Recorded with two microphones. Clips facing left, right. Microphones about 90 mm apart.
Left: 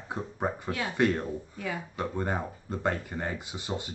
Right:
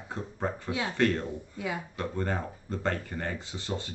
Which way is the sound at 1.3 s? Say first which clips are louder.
Even; 15° right (ahead or behind).